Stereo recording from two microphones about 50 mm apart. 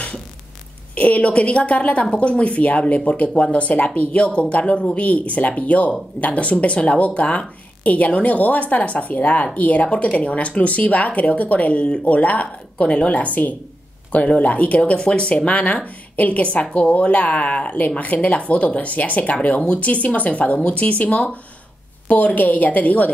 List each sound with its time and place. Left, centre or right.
0.9 s a woman's voice: left